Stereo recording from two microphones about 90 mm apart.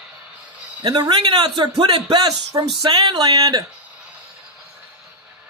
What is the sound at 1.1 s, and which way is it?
A man's voice, 60° right (ahead or behind).